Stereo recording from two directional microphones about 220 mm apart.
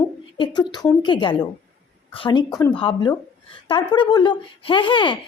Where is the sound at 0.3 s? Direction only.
20° left (ahead or behind).